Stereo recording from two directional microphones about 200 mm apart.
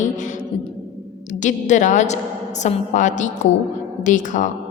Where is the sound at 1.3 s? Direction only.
40° left (ahead or behind).